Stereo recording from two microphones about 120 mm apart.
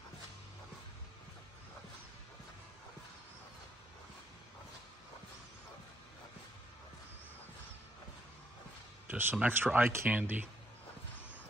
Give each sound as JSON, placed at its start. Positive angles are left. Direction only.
{"t": 9.0, "sound": "speech", "side_deg": -15}